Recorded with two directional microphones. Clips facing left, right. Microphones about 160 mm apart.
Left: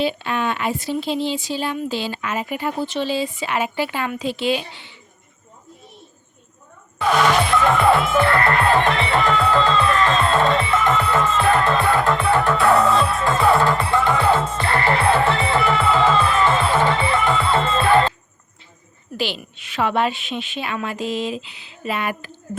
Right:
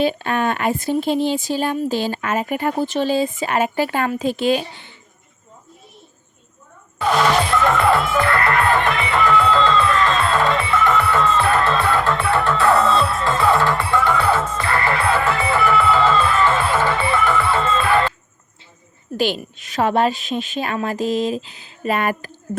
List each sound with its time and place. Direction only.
0.0 s a woman's voice: 45° right (ahead or behind)
7.6 s music: 15° left (ahead or behind)
9.5 s music: 15° left (ahead or behind)
19.1 s a woman's voice: 45° right (ahead or behind)